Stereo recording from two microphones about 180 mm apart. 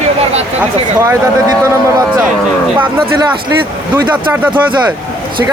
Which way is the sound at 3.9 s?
10° right (ahead or behind).